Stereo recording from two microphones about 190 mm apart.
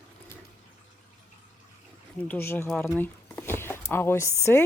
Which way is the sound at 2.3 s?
10° left (ahead or behind).